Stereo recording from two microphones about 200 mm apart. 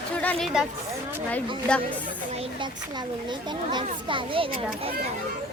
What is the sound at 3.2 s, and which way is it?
A child's voice, 20° right (ahead or behind).